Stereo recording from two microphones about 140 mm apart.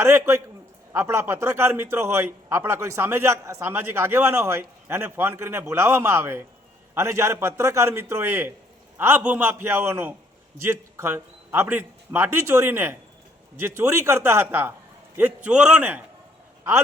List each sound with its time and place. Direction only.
0.0 s a man's voice: 20° right (ahead or behind)